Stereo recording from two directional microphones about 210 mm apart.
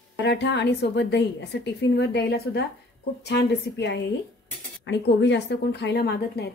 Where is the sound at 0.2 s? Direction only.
55° left (ahead or behind).